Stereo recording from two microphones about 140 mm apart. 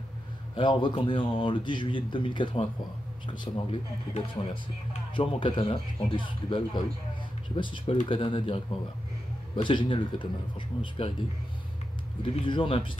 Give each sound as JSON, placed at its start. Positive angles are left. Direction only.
{"t": 0.6, "sound": "speech", "side_deg": 35}
{"t": 12.2, "sound": "speech", "side_deg": 35}